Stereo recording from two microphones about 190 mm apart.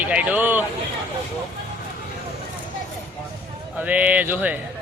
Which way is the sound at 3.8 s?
10° right (ahead or behind).